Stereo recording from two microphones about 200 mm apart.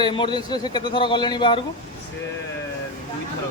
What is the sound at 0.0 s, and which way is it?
Speech, 25° left (ahead or behind).